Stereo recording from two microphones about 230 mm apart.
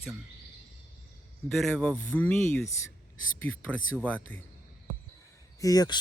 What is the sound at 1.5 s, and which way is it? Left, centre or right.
Speech, centre.